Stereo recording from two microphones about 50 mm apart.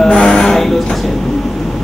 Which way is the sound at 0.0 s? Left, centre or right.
Centre.